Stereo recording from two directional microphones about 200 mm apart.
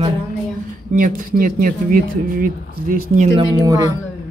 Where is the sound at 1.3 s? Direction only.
45° right (ahead or behind).